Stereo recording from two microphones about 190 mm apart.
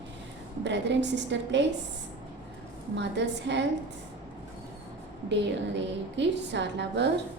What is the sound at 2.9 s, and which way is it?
Speech, 65° right (ahead or behind).